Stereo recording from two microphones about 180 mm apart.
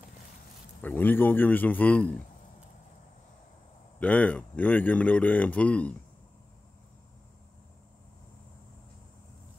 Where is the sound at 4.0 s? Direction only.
5° left (ahead or behind).